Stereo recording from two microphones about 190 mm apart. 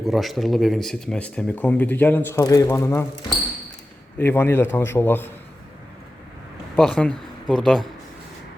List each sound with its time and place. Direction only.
0.0 s speech: centre (ahead or behind)
4.2 s speech: 10° left (ahead or behind)
6.7 s speech: 5° left (ahead or behind)